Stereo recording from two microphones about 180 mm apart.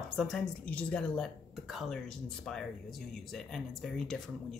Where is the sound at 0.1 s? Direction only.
Centre (ahead or behind).